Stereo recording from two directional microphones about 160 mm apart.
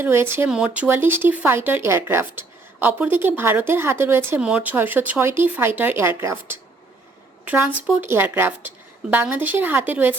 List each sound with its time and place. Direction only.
0.0 s speech: 15° right (ahead or behind)
7.9 s speech: 15° right (ahead or behind)